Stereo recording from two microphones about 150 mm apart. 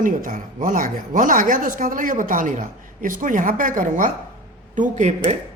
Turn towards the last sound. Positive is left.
turn(degrees=-55)  # may be behind; listen again after turning